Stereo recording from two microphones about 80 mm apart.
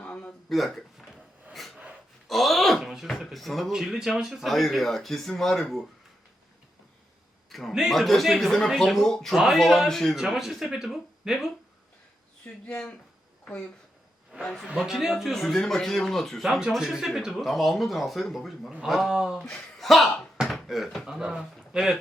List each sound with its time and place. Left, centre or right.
0.0 s a sound: centre
0.5 s speech: centre
1.5 s snort: centre
2.2 s speech: centre
7.5 s speech: centre
12.6 s speech: centre
14.4 s speech: centre
19.4 s speech: centre
19.8 s a sound: centre
20.5 s speech: centre